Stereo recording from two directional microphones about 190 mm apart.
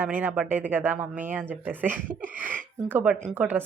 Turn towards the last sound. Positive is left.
turn(degrees=-10)  # may be behind; listen again after turning